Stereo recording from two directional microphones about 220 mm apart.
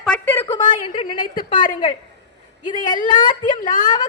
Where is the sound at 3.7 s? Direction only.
35° left (ahead or behind).